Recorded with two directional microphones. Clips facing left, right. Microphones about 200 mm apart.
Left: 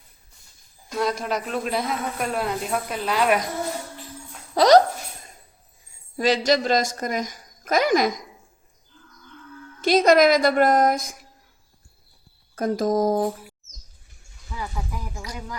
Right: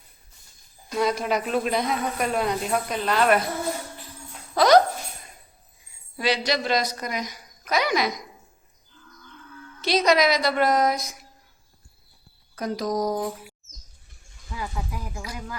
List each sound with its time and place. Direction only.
0.9 s speech: centre (ahead or behind)
4.5 s speech: 35° left (ahead or behind)
6.1 s a woman's voice: 45° left (ahead or behind)
9.8 s a woman's voice: 50° left (ahead or behind)
12.5 s a woman's voice: 50° left (ahead or behind)
14.8 s a woman's voice: 10° right (ahead or behind)